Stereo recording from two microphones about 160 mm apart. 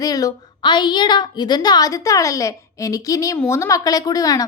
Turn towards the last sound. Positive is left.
turn(degrees=20)  # may be behind; listen again after turning